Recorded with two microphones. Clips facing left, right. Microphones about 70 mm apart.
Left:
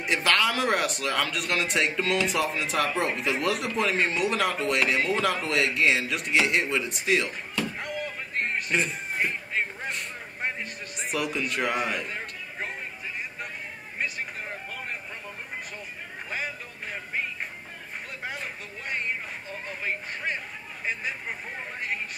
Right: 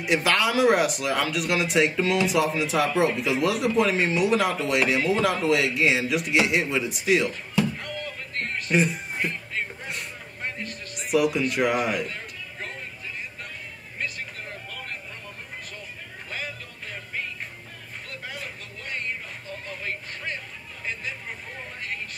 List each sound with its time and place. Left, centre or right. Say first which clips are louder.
0.0 s speech: right 2 dB; centre
7.7 s music: left 1 dB; centre
8.6 s speech: right 4 dB; centre
9.2 s music: left 2 dB; centre
11.0 s speech: right 7 dB; centre
12.1 s a sound: left 1 dB; centre
13.9 s a sound: left 1 dB; centre
16.3 s music: left 1 dB; centre
19.8 s a sound: left 5 dB; centre